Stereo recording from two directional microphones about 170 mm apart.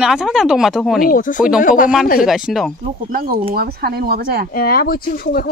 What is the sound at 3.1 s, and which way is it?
Speech, 60° right (ahead or behind).